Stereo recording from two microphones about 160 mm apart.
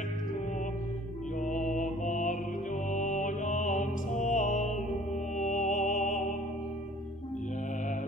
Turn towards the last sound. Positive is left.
turn(degrees=50)  # may be behind; listen again after turning